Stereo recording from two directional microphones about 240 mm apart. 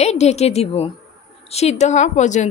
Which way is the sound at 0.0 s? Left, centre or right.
Left.